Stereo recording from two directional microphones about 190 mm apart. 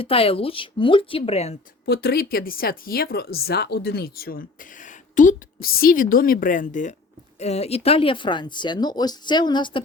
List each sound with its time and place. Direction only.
0.0 s speech: 30° left (ahead or behind)
1.8 s speech: 55° left (ahead or behind); by 9.8 s 25° left (ahead or behind)